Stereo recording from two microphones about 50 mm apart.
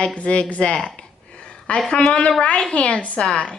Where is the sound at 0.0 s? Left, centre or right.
Left.